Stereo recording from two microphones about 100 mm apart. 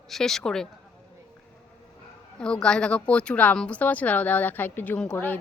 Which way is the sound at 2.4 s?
10° left (ahead or behind).